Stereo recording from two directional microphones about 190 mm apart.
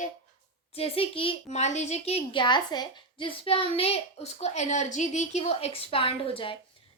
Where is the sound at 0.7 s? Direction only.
30° left (ahead or behind).